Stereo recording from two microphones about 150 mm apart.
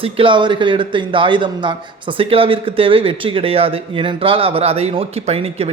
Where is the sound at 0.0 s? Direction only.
35° right (ahead or behind).